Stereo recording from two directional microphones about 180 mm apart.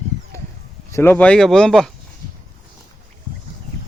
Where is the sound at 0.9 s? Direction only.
15° left (ahead or behind).